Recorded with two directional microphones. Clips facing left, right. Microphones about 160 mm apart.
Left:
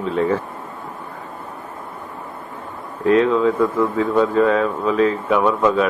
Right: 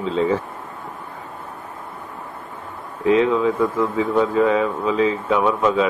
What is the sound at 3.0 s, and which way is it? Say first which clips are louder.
Speech: left 1 dB; 15° right (ahead or behind).